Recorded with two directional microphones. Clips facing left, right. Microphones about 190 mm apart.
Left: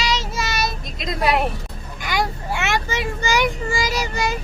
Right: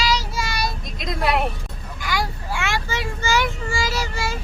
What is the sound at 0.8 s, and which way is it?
Vehicle, centre (ahead or behind).